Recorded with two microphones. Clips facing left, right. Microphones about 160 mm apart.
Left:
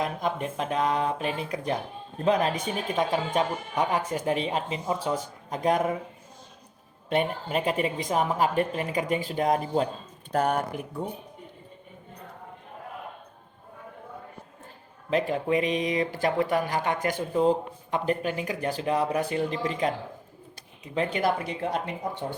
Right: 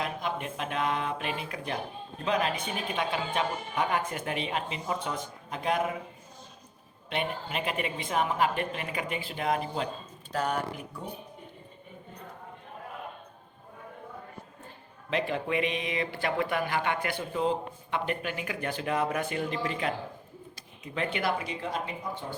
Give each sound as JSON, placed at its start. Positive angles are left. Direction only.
{"t": 0.0, "sound": "speech", "side_deg": 45}
{"t": 7.1, "sound": "speech", "side_deg": 40}
{"t": 10.3, "sound": "speech", "side_deg": 55}
{"t": 15.1, "sound": "speech", "side_deg": 40}
{"t": 20.9, "sound": "speech", "side_deg": 35}